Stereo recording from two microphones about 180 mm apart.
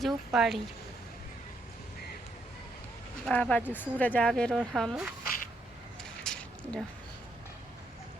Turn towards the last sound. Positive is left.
turn(degrees=5)  # may be behind; listen again after turning